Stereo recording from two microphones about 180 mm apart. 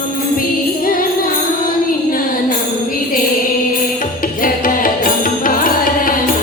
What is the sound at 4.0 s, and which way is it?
Music, 50° left (ahead or behind).